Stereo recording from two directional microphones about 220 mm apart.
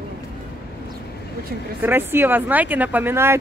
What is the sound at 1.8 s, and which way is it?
Speech, 10° right (ahead or behind).